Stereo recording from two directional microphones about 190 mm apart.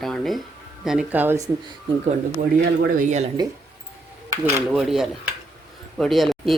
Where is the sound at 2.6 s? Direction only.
45° right (ahead or behind).